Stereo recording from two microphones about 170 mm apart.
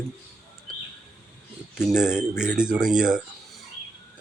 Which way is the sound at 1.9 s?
5° right (ahead or behind).